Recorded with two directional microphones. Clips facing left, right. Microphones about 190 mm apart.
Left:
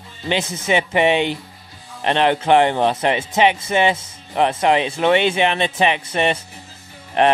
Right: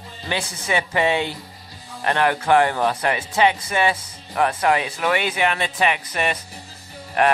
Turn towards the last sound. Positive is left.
turn(degrees=25)  # may be behind; listen again after turning